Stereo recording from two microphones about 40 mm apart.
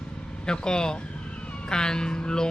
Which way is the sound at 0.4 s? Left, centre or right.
Centre.